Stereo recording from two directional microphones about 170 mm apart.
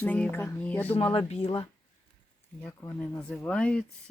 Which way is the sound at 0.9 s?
30° left (ahead or behind).